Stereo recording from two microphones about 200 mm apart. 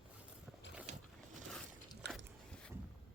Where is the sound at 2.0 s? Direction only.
60° right (ahead or behind).